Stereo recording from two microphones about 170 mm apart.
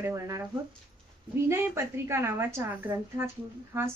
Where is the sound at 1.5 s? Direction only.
15° right (ahead or behind).